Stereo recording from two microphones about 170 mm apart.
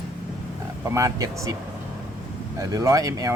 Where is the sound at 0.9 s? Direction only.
20° right (ahead or behind).